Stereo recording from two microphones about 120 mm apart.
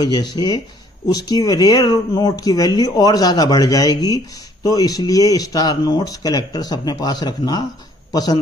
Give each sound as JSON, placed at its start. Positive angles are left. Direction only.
{"t": 0.0, "sound": "speech", "side_deg": 35}